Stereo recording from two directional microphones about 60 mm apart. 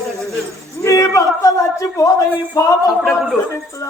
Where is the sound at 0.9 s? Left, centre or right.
Left.